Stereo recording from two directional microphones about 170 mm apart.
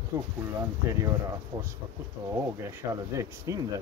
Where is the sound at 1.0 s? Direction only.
15° right (ahead or behind).